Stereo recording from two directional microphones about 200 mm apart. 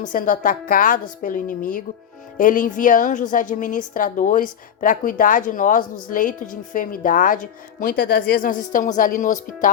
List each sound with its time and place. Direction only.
0.0 s a woman's voice: 40° left (ahead or behind)